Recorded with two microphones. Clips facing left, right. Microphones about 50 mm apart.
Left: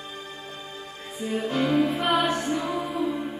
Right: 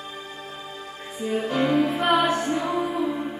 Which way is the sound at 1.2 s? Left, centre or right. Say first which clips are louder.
Right 2 dB; centre.